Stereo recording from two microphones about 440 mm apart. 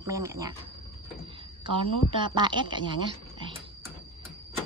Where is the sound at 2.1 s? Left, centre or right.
Centre.